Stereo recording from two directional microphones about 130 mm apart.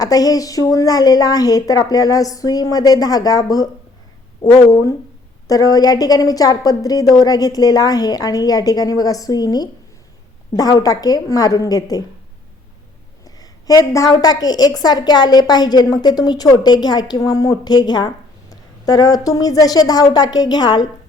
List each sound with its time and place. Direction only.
0.0 s a woman's voice: 30° left (ahead or behind)
4.7 s a woman's voice: 25° left (ahead or behind)
13.2 s a woman's voice: 30° left (ahead or behind)